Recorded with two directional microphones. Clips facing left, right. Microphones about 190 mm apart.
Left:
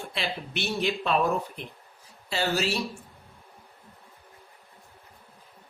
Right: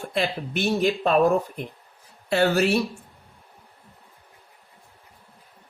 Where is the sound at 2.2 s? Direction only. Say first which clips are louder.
Right 7 dB; 55° right (ahead or behind).